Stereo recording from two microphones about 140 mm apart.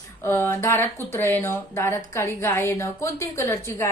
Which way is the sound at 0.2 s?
15° left (ahead or behind).